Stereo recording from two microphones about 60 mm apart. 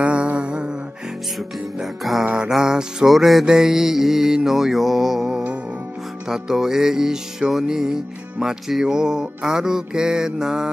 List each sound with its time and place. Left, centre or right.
0.0 s music: centre
1.8 s mantra: centre
2.3 s music: centre
3.4 s mantra: centre
6.2 s music: centre